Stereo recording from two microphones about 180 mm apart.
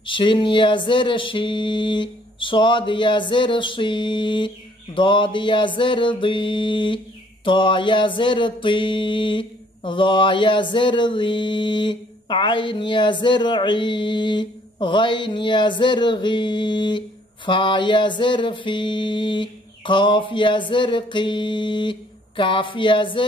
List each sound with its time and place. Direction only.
0.0 s music: 25° left (ahead or behind)